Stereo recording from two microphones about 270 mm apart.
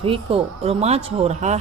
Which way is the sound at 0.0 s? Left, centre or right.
Centre.